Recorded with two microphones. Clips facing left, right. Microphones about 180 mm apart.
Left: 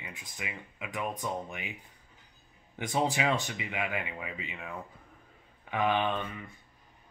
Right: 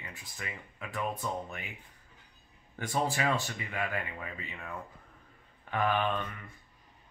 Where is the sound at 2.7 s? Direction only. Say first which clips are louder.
Left 2 dB; 15° left (ahead or behind).